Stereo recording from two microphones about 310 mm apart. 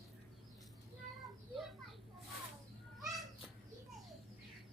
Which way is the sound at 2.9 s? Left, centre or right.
Centre.